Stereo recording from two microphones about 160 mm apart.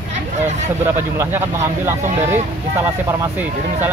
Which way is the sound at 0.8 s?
15° right (ahead or behind).